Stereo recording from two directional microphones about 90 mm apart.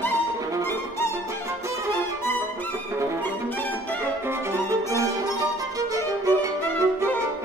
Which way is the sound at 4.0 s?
30° right (ahead or behind).